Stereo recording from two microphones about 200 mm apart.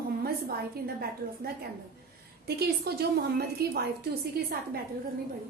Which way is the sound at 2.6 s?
50° right (ahead or behind).